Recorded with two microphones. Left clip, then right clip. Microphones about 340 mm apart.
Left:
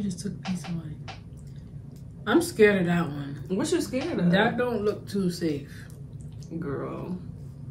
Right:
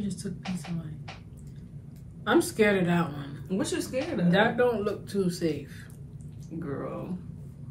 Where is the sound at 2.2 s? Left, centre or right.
Centre.